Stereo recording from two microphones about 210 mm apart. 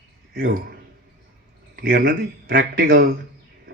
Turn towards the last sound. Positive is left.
turn(degrees=-45)  # may be behind; listen again after turning